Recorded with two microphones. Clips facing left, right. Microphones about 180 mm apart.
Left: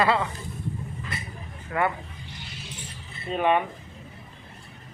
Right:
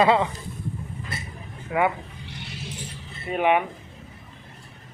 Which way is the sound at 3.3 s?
15° right (ahead or behind).